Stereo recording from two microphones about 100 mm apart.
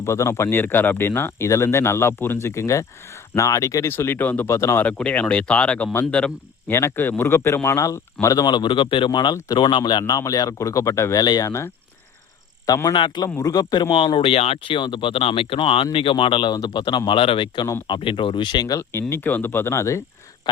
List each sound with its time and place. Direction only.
0.0 s speech: 30° left (ahead or behind)
4.9 s speech: 10° left (ahead or behind)
6.7 s speech: 20° left (ahead or behind)
11.2 s speech: 40° left (ahead or behind)
11.4 s speech: 25° left (ahead or behind)
12.6 s speech: 40° left (ahead or behind)
12.9 s speech: 50° left (ahead or behind)
13.4 s speech: 40° left (ahead or behind)
13.9 s speech: 55° left (ahead or behind)
17.1 s speech: 60° left (ahead or behind); by 18.8 s 45° left (ahead or behind)
18.8 s speech: 25° left (ahead or behind)